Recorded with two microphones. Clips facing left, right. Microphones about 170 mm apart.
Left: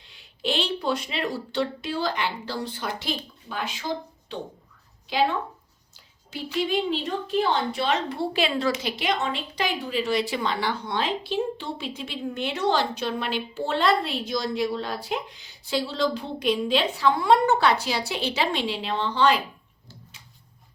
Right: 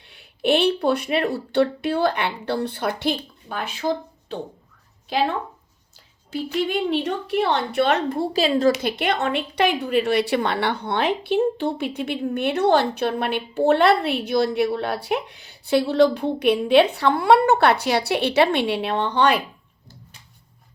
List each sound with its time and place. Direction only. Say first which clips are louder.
0.0 s a woman's voice: right 7 dB; 60° right (ahead or behind)
6.3 s a woman's voice: right 2 dB; 60° right (ahead or behind)
8.2 s speech: right 8 dB; 40° right (ahead or behind)
8.7 s a woman's voice: right 4 dB; 60° right (ahead or behind)